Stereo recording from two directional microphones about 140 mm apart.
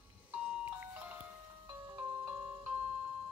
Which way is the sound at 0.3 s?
10° right (ahead or behind).